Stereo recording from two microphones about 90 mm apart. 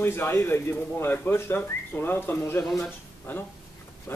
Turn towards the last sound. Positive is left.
turn(degrees=25)  # may be behind; listen again after turning